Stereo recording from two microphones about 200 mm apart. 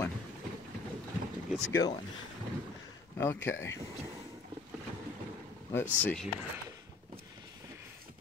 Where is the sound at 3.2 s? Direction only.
10° left (ahead or behind).